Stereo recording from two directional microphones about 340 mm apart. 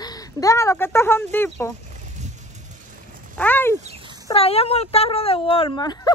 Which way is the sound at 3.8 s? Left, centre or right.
Centre.